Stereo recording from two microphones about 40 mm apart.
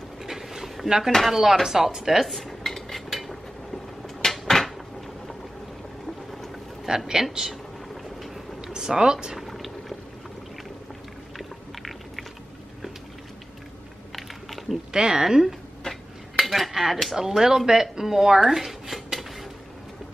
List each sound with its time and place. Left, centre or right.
0.2 s a sound: centre
1.2 s speech: centre
2.2 s cutlery: centre
4.2 s cupboard open or close: centre
6.9 s speech: right
7.2 s speech: centre
8.7 s speech: centre
9.4 s boiling: centre
11.3 s a sound: centre
14.1 s typing: centre
14.9 s speech: centre
15.9 s dishes: centre